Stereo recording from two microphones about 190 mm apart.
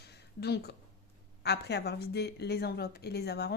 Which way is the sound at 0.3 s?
60° left (ahead or behind).